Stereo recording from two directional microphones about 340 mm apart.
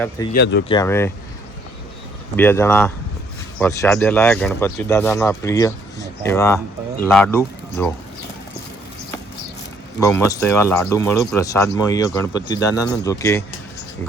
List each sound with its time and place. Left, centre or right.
0.3 s speech: left
0.7 s speech: centre
2.3 s speech: centre
10.0 s speech: centre